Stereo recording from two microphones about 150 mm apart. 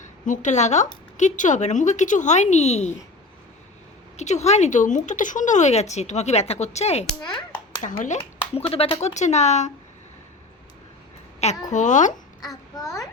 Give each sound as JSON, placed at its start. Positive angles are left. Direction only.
{"t": 0.3, "sound": "speech", "side_deg": 55}
{"t": 4.2, "sound": "speech", "side_deg": 50}
{"t": 7.2, "sound": "a child's voice", "side_deg": 30}
{"t": 7.8, "sound": "speech", "side_deg": 55}
{"t": 8.4, "sound": "speech", "side_deg": 40}
{"t": 11.7, "sound": "a child's voice", "side_deg": 55}
{"t": 12.7, "sound": "a child's voice", "side_deg": 20}